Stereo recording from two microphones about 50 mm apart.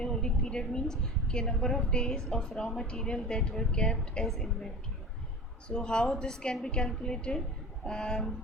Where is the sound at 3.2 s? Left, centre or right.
Centre.